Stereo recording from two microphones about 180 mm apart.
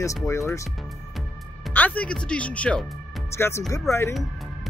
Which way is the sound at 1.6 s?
10° left (ahead or behind).